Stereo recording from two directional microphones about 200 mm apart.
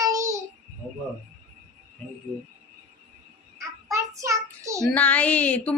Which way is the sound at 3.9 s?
15° right (ahead or behind).